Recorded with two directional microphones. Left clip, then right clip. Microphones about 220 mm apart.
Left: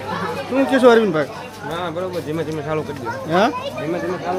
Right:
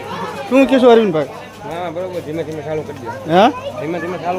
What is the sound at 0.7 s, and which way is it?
Speech, 20° right (ahead or behind).